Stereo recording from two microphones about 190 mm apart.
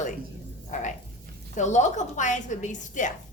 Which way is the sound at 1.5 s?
40° left (ahead or behind).